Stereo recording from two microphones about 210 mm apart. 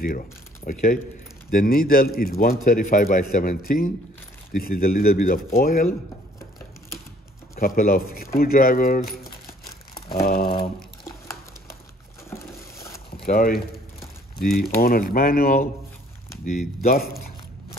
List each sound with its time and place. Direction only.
1.5 s a man's voice: 40° left (ahead or behind)
7.5 s a man's voice: 45° left (ahead or behind)
10.2 s a man's voice: 45° left (ahead or behind)
12.3 s a sound: 15° left (ahead or behind)
13.2 s a man's voice: 45° left (ahead or behind)